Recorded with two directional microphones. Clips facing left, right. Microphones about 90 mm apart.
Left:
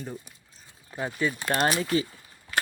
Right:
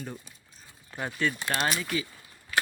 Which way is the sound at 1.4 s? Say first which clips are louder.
Left 4 dB; 45° left (ahead or behind).